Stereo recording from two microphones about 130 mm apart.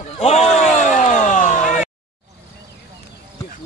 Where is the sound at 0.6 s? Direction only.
70° left (ahead or behind).